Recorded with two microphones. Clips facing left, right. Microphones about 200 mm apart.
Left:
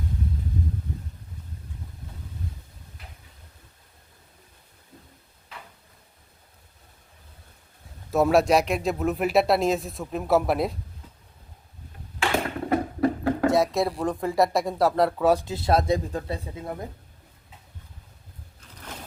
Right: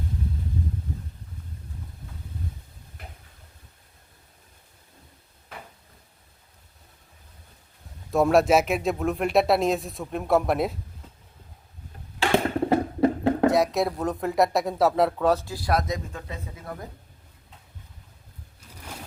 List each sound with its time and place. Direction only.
8.1 s speech: centre (ahead or behind)
12.6 s a sound: 25° right (ahead or behind)
13.5 s speech: centre (ahead or behind)
15.3 s speech: 15° left (ahead or behind)